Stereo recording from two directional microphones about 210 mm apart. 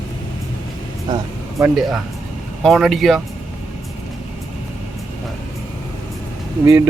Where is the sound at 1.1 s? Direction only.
20° right (ahead or behind).